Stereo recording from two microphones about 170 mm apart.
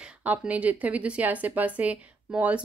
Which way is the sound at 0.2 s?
10° right (ahead or behind).